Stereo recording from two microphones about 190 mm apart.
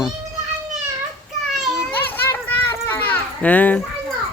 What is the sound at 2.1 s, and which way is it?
Children playing, 10° left (ahead or behind).